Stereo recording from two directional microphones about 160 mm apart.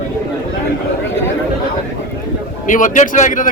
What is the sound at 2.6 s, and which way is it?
Speech, 55° left (ahead or behind).